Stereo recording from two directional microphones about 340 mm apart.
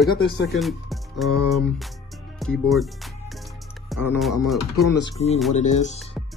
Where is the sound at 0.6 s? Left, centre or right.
Centre.